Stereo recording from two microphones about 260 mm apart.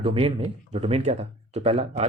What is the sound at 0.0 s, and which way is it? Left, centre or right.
Speech, right.